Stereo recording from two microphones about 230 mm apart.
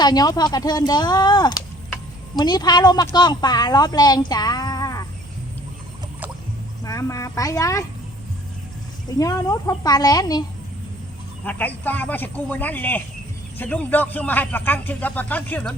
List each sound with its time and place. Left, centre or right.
0.0 s speech: centre
6.8 s speech: centre
9.0 s speech: centre
11.4 s speech: centre